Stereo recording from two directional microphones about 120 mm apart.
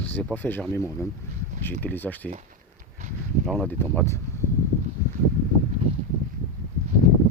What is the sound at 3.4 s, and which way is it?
Speech, 10° left (ahead or behind).